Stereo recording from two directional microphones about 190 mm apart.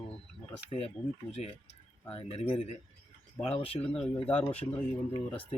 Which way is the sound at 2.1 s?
30° left (ahead or behind).